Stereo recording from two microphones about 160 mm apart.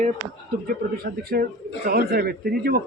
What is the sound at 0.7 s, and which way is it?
A man's voice, 70° right (ahead or behind).